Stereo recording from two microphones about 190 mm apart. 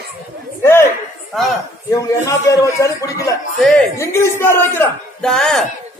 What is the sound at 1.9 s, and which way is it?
Speech, 15° left (ahead or behind).